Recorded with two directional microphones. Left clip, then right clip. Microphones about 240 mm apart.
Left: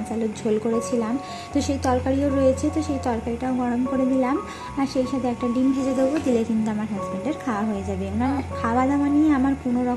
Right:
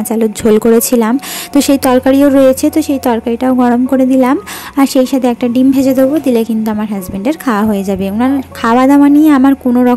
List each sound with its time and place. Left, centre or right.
0.2 s a woman's voice: right